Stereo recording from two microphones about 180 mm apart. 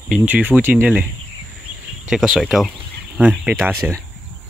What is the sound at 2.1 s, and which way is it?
Speech, centre (ahead or behind).